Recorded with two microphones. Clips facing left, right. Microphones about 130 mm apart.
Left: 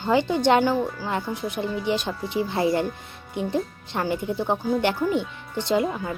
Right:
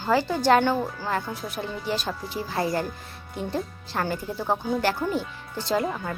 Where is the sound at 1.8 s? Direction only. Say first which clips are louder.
Left 3 dB; 20° left (ahead or behind).